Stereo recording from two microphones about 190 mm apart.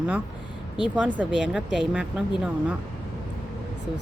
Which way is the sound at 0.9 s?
5° right (ahead or behind).